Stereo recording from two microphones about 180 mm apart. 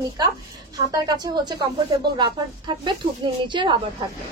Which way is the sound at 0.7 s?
20° right (ahead or behind).